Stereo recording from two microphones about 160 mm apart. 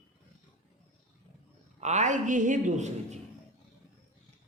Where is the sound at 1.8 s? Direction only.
45° right (ahead or behind).